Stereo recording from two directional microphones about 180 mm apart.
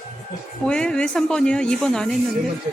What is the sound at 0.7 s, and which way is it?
Speech, 5° left (ahead or behind).